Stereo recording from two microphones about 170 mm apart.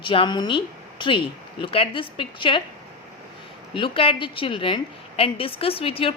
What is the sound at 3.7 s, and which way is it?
A woman's voice, 30° left (ahead or behind).